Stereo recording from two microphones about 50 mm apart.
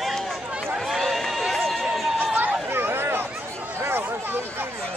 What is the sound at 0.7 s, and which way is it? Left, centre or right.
Run, centre.